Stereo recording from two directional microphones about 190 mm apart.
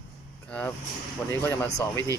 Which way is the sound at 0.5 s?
5° left (ahead or behind).